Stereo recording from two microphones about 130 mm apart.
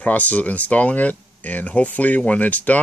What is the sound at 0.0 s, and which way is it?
Speech, 10° left (ahead or behind).